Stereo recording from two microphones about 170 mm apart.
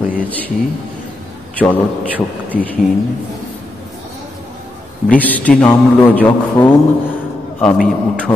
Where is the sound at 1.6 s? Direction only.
10° left (ahead or behind).